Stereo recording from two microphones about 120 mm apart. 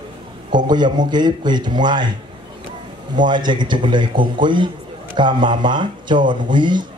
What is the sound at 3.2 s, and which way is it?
A man's voice, 40° right (ahead or behind).